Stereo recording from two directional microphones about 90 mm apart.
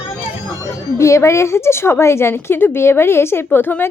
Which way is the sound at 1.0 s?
35° left (ahead or behind).